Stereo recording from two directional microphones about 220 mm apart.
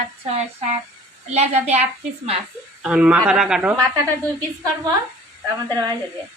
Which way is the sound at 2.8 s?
5° right (ahead or behind).